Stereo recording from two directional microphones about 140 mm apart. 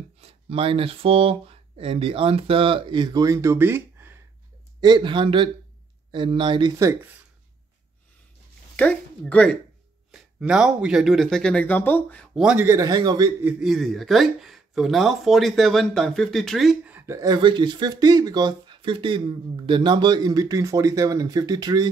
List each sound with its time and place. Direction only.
0.2 s speech: 45° right (ahead or behind); by 4.2 s 15° right (ahead or behind)
4.7 s speech: 35° right (ahead or behind)
8.7 s speech: 10° left (ahead or behind)
10.1 s speech: 5° right (ahead or behind); by 12.3 s 10° left (ahead or behind)
12.4 s a man's voice: 5° right (ahead or behind)
12.6 s speech: 25° right (ahead or behind)
13.4 s a man's voice: 15° right (ahead or behind)
13.7 s speech: centre (ahead or behind)
16.9 s a sound: 20° right (ahead or behind)
17.4 s speech: 35° right (ahead or behind)